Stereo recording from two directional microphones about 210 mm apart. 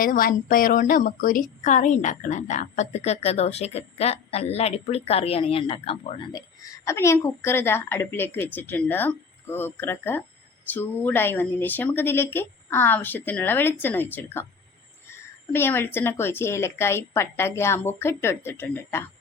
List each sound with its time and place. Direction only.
0.0 s a woman's voice: 40° left (ahead or behind); by 14.4 s 10° left (ahead or behind)
15.5 s a woman's voice: 10° left (ahead or behind)